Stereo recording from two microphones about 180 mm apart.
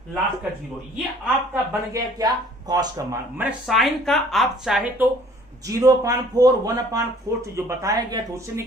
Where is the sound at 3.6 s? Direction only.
Centre (ahead or behind).